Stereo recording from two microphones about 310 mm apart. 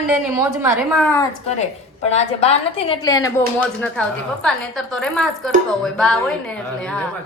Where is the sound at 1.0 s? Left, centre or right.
Centre.